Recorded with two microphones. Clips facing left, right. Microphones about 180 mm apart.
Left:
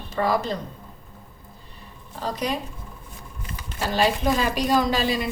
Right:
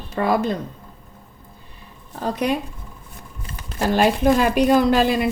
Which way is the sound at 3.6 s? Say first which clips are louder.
Right 5 dB; 55° right (ahead or behind).